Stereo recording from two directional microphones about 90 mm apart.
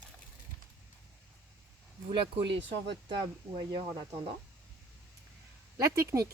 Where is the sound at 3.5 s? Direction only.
45° right (ahead or behind).